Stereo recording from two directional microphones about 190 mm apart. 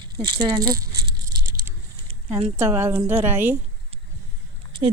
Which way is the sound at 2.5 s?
15° right (ahead or behind).